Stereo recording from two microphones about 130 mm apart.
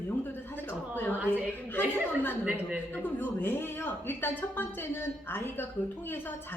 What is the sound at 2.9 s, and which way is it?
A woman's voice, 15° left (ahead or behind).